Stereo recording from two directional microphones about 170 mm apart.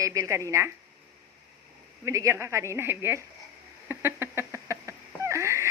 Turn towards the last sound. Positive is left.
turn(degrees=-15)  # may be behind; listen again after turning